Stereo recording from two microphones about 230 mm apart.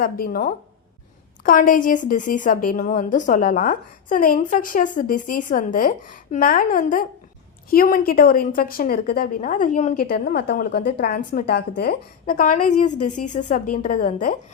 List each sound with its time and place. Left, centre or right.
0.0 s a woman's voice: left